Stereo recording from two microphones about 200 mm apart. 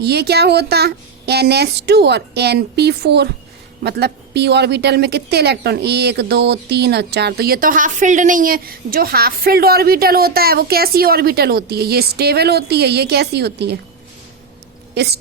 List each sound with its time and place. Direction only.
0.0 s a woman's voice: 55° right (ahead or behind)
14.9 s speech: 55° right (ahead or behind)